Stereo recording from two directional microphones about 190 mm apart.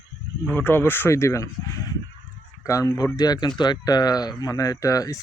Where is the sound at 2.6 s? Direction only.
15° left (ahead or behind).